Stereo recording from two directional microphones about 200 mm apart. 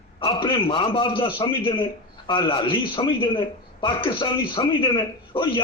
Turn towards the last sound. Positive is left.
turn(degrees=25)  # may be behind; listen again after turning